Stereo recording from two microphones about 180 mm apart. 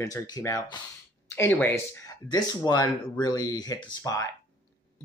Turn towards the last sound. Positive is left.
turn(degrees=20)  # may be behind; listen again after turning